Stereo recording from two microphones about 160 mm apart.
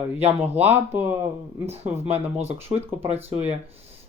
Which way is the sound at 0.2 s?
40° right (ahead or behind).